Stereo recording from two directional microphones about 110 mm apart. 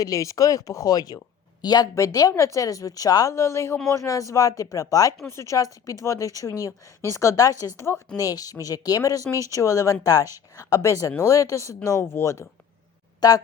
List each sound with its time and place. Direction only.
0.0 s a woman's voice: 30° left (ahead or behind)